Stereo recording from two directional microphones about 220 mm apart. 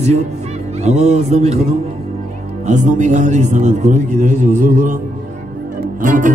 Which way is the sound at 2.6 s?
35° right (ahead or behind).